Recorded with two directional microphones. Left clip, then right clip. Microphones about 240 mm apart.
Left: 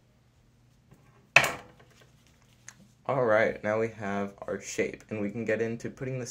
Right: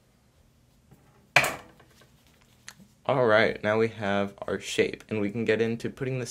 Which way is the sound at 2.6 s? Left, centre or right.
Right.